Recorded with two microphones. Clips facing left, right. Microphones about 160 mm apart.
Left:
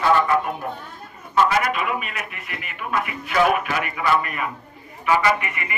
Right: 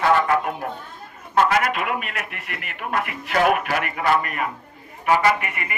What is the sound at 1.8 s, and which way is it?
A man's voice, 55° right (ahead or behind).